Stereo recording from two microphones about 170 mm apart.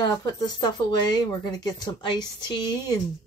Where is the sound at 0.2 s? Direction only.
25° left (ahead or behind).